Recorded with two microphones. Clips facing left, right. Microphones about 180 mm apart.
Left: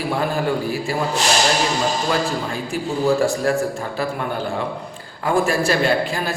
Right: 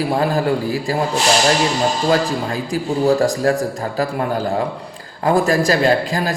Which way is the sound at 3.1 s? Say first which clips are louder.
Right 2 dB; 35° right (ahead or behind).